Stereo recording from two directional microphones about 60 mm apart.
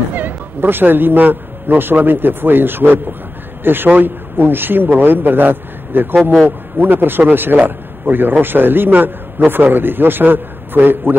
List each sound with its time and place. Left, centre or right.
0.1 s a man's voice: right